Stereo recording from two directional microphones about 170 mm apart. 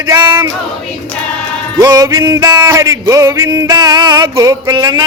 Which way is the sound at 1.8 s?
20° right (ahead or behind).